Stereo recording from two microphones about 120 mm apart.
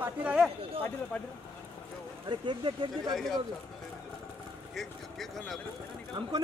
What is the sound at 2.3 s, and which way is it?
Speech, 40° right (ahead or behind).